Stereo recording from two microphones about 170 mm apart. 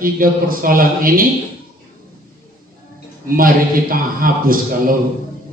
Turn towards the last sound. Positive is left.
turn(degrees=-55)  # may be behind; listen again after turning